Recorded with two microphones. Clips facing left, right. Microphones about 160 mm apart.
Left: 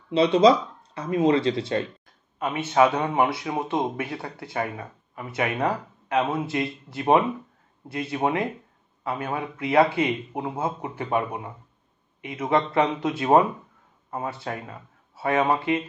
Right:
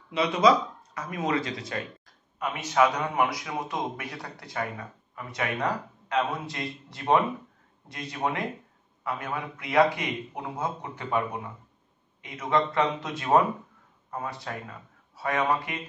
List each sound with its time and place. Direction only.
0.1 s speech: 30° left (ahead or behind)
12.2 s speech: 25° left (ahead or behind)